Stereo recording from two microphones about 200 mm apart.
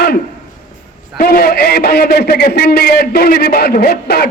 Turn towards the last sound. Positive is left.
turn(degrees=50)  # may be behind; listen again after turning